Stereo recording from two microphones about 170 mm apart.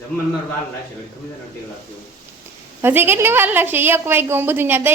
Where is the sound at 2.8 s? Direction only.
15° right (ahead or behind).